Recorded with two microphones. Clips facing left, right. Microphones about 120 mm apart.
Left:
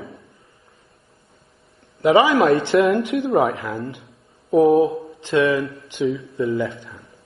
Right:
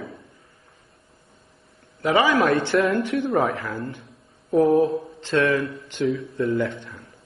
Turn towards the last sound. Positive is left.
turn(degrees=0)  # may be behind; listen again after turning